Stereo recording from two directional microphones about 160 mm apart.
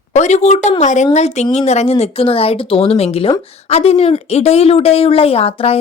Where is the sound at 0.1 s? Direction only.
45° left (ahead or behind).